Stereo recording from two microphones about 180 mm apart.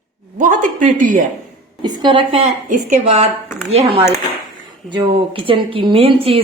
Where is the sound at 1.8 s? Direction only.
25° right (ahead or behind).